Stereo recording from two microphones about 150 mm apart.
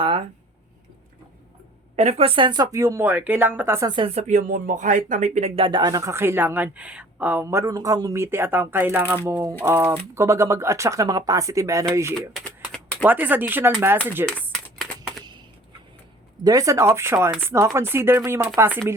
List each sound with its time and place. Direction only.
0.0 s speech: 40° right (ahead or behind)
2.0 s speech: 45° right (ahead or behind); by 3.8 s 15° right (ahead or behind)
3.8 s speech: 30° right (ahead or behind)
4.1 s speech: 50° right (ahead or behind); by 11.9 s 20° right (ahead or behind)
12.5 s a sound: 10° left (ahead or behind)
13.1 s speech: 10° right (ahead or behind)
14.8 s a sound: centre (ahead or behind)
16.4 s speech: 25° right (ahead or behind)